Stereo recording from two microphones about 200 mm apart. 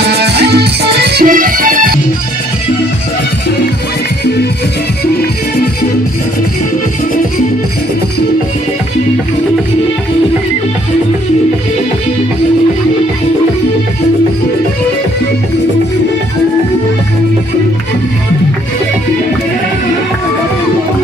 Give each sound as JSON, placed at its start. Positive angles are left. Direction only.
{"t": 0.0, "sound": "music", "side_deg": -55}